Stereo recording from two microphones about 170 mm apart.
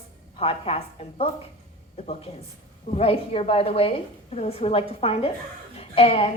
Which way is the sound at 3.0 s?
35° left (ahead or behind).